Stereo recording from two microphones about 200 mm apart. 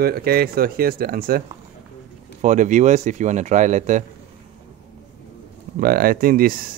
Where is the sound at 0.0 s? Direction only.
50° right (ahead or behind).